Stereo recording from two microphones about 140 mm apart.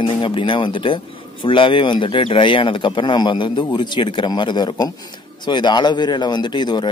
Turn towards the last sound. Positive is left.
turn(degrees=30)  # may be behind; listen again after turning